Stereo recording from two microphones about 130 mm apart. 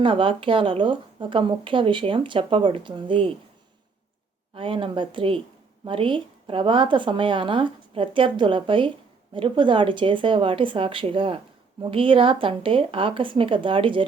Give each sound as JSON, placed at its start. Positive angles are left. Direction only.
{"t": 0.0, "sound": "speech", "side_deg": -40}
{"t": 4.5, "sound": "a woman's voice", "side_deg": -45}